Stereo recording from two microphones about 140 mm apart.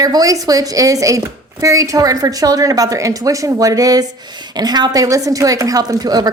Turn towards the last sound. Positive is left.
turn(degrees=-30)  # may be behind; listen again after turning